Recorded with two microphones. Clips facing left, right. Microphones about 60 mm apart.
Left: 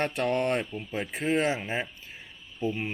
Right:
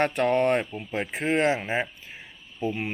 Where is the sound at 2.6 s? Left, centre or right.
Centre.